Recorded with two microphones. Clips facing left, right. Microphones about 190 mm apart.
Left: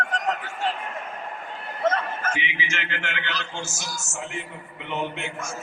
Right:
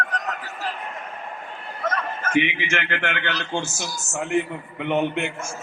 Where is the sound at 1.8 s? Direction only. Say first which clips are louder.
Left 4 dB; 25° left (ahead or behind).